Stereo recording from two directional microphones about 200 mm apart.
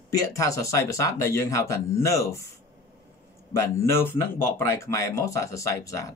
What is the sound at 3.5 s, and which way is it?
Speech, 15° left (ahead or behind).